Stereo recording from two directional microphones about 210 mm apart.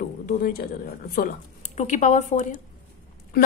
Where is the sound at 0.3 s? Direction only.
45° left (ahead or behind).